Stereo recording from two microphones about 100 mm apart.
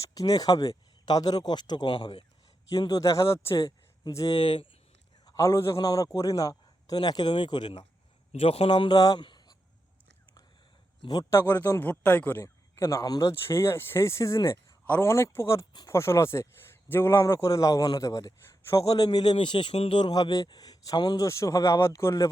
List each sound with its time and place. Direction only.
0.0 s a man's voice: 35° left (ahead or behind); by 2.2 s 55° left (ahead or behind)
2.6 s a man's voice: 40° left (ahead or behind)
4.4 s a man's voice: 55° left (ahead or behind)
5.2 s a man's voice: 35° left (ahead or behind); by 7.9 s 50° left (ahead or behind)
8.3 s speech: 85° left; by 9.0 s 60° left (ahead or behind)
9.0 s a man's voice: 40° left (ahead or behind)
9.2 s a sound: 45° left (ahead or behind)
11.0 s a man's voice: 45° left (ahead or behind)
11.3 s speech: 20° left (ahead or behind)
12.4 s speech: 30° left (ahead or behind)
13.5 s a man's voice: 25° left (ahead or behind); by 19.7 s 55° left (ahead or behind)
19.7 s speech: 85° left
20.0 s a man's voice: 50° left (ahead or behind)
21.2 s a man's voice: 30° left (ahead or behind)